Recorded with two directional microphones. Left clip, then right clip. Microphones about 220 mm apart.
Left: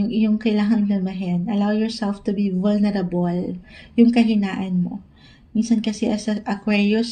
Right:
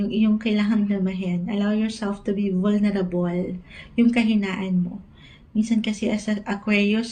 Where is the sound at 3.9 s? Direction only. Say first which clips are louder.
Left 4 dB; 50° left (ahead or behind).